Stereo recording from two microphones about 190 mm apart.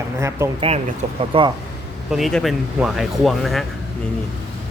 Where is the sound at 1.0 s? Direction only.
35° right (ahead or behind).